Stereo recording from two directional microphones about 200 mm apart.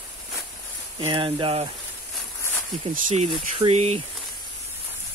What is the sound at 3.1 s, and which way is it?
Speech, 30° right (ahead or behind).